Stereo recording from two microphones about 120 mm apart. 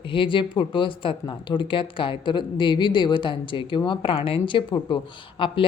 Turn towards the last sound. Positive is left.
turn(degrees=45)  # may be behind; listen again after turning